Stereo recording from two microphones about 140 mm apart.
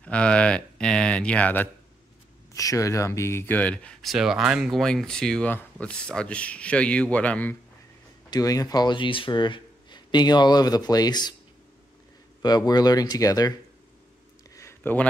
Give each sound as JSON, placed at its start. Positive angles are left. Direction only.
{"t": 0.0, "sound": "speech", "side_deg": 10}
{"t": 2.5, "sound": "speech", "side_deg": 25}
{"t": 8.3, "sound": "speech", "side_deg": 25}
{"t": 12.4, "sound": "speech", "side_deg": 30}
{"t": 14.5, "sound": "a sound", "side_deg": 20}